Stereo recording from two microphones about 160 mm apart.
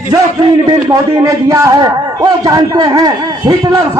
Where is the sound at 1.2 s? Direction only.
20° right (ahead or behind).